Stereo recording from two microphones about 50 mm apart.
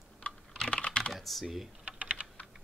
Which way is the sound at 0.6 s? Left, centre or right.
Left.